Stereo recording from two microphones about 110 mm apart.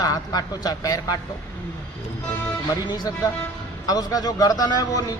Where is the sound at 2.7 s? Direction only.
35° left (ahead or behind).